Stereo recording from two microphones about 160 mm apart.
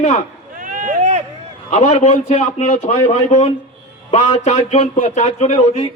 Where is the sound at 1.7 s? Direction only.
45° left (ahead or behind).